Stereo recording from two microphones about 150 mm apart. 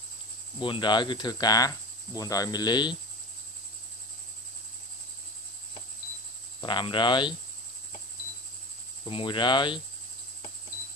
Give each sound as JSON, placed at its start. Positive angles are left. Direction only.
{"t": 0.6, "sound": "speech", "side_deg": 30}
{"t": 6.6, "sound": "speech", "side_deg": 30}
{"t": 9.0, "sound": "speech", "side_deg": 35}